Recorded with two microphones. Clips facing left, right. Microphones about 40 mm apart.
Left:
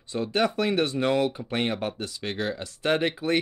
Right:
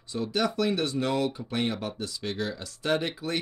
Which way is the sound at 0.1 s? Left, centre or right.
Left.